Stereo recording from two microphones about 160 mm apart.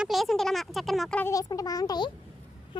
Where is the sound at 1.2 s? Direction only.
20° left (ahead or behind).